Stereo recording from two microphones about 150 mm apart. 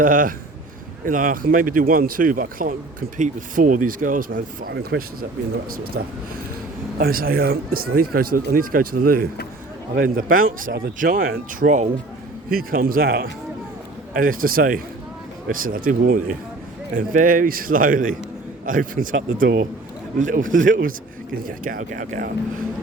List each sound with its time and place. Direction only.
0.0 s speech: 65° right (ahead or behind); by 5.0 s 90° right
7.0 s speech: 75° right (ahead or behind); by 11.9 s 55° right (ahead or behind)
12.5 s speech: 75° right (ahead or behind)
14.1 s speech: 70° right (ahead or behind)
20.1 s speech: 60° right (ahead or behind)